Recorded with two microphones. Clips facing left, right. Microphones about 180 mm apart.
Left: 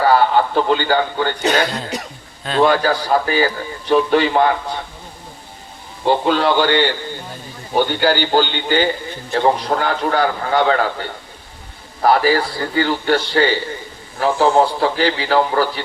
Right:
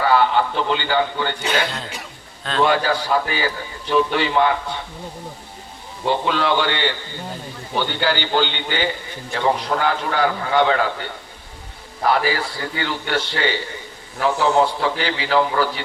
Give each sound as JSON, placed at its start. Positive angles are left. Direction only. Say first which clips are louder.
{"t": 0.0, "sound": "a man's voice", "louder": "left 3 dB", "side_deg": 40}
{"t": 6.1, "sound": "a man's voice", "louder": "left 4 dB", "side_deg": 35}
{"t": 12.0, "sound": "a man's voice", "louder": "left 5 dB", "side_deg": 40}